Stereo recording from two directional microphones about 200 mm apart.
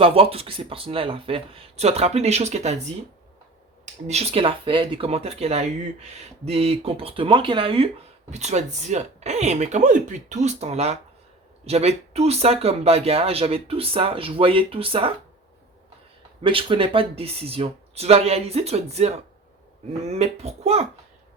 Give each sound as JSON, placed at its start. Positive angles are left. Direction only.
{"t": 0.0, "sound": "speech", "side_deg": -30}
{"t": 4.0, "sound": "speech", "side_deg": -30}
{"t": 16.4, "sound": "speech", "side_deg": -25}